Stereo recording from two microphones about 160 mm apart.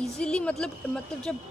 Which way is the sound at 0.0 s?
5° left (ahead or behind).